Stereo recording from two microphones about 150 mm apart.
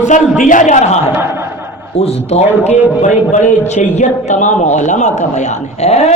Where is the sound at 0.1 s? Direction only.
60° left (ahead or behind).